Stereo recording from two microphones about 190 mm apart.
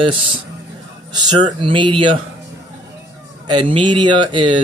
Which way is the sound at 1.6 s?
25° right (ahead or behind).